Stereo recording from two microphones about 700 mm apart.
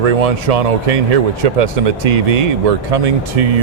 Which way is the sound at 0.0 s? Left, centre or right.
Right.